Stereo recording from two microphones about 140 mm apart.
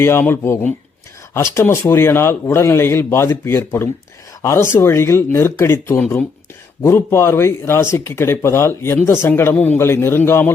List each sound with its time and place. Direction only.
0.0 s speech: 15° left (ahead or behind)